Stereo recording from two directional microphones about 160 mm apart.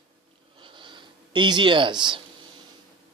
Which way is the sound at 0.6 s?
30° right (ahead or behind).